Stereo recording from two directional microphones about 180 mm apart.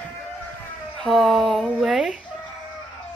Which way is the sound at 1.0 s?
Centre (ahead or behind).